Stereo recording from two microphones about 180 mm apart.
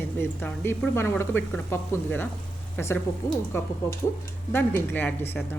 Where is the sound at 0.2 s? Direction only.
10° left (ahead or behind).